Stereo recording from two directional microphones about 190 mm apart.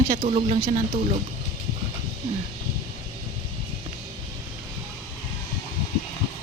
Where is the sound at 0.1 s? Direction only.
35° right (ahead or behind).